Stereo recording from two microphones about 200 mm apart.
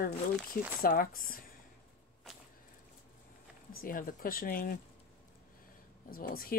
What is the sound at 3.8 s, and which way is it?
Speech, 45° left (ahead or behind).